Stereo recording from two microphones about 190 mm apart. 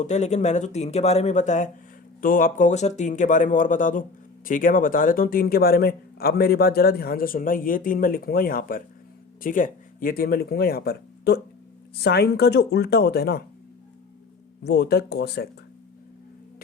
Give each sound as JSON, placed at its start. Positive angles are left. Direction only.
{"t": 0.0, "sound": "speech", "side_deg": 35}
{"t": 14.6, "sound": "speech", "side_deg": 60}